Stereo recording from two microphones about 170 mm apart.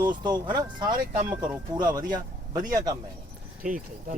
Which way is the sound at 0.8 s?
55° right (ahead or behind).